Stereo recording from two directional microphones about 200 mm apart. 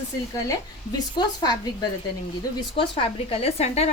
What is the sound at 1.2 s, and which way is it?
Speech, 20° left (ahead or behind).